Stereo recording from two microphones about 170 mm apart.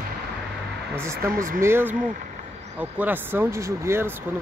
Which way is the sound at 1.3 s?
55° right (ahead or behind).